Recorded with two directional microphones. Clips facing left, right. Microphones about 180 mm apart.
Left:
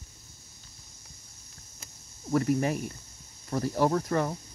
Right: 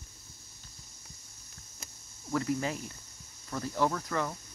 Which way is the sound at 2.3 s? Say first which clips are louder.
Left 5 dB; 30° left (ahead or behind).